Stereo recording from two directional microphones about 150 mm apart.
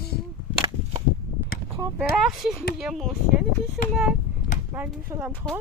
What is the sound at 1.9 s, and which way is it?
Speech, centre (ahead or behind).